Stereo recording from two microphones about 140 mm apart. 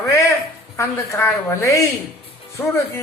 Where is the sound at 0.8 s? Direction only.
20° left (ahead or behind).